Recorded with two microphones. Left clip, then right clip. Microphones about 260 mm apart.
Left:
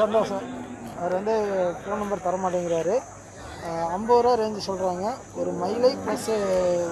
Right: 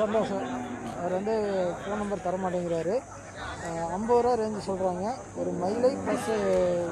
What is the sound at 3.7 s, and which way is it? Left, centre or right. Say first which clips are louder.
Speech: left 4 dB; left.